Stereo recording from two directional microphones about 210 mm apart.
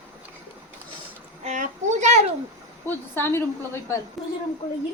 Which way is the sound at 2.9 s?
10° left (ahead or behind).